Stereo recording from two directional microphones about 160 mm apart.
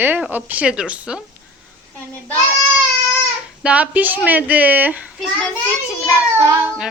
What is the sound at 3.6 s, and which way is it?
A woman's voice, 10° right (ahead or behind).